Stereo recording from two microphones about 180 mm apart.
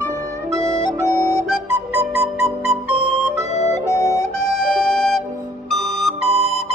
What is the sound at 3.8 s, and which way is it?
Music, 15° left (ahead or behind).